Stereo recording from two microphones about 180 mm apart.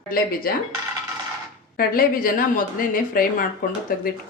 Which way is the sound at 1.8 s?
50° left (ahead or behind).